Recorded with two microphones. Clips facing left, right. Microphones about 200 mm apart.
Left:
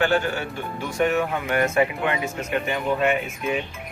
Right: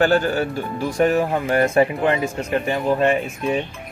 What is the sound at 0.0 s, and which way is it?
Speech, 40° right (ahead or behind).